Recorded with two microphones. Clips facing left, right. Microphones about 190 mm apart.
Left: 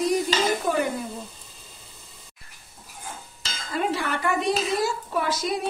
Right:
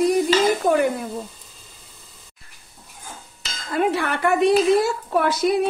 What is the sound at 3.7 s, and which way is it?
A woman's voice, 65° right (ahead or behind).